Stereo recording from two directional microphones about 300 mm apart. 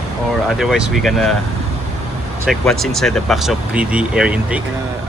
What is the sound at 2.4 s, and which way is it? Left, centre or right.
Speech, centre.